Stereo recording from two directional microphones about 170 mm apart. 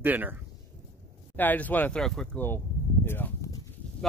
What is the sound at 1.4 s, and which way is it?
Speech, 10° left (ahead or behind).